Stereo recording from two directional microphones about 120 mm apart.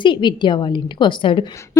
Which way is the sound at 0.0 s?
40° left (ahead or behind).